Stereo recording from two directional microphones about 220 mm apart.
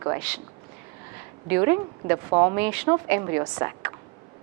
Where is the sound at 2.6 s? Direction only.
10° right (ahead or behind).